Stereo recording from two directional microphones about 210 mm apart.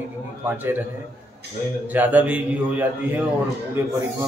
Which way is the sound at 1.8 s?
10° right (ahead or behind).